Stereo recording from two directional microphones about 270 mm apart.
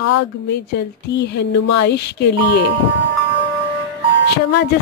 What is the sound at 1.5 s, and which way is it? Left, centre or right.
Speech, left.